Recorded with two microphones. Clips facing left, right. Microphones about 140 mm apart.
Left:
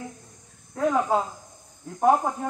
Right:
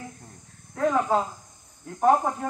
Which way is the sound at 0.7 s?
10° left (ahead or behind).